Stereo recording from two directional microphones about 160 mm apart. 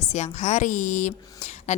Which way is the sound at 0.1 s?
45° left (ahead or behind).